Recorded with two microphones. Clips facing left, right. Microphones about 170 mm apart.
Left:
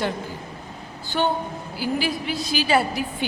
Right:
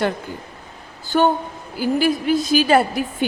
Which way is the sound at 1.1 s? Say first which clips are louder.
Right 6 dB; 50° right (ahead or behind).